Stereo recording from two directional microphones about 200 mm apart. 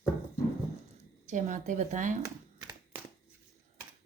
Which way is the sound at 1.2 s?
35° right (ahead or behind).